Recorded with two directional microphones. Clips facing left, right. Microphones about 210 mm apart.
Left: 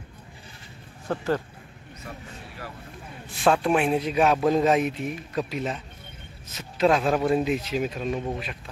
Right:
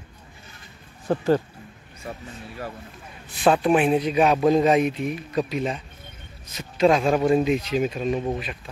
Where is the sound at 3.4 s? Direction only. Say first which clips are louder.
Right 3 dB; 5° right (ahead or behind).